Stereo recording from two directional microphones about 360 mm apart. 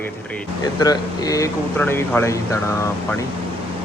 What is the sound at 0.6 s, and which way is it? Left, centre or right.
Speech, centre.